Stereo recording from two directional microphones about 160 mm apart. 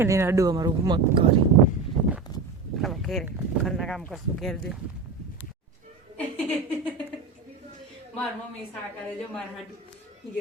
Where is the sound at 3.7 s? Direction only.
Centre (ahead or behind).